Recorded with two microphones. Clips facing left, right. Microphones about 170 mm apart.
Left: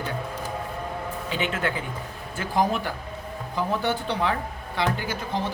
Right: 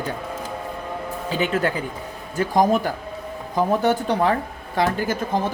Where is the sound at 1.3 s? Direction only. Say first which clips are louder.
Right 6 dB; 40° right (ahead or behind).